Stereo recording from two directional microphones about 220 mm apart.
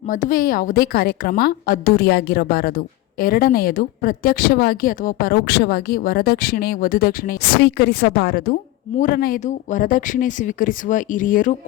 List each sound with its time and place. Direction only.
0.1 s a woman's voice: 40° left (ahead or behind)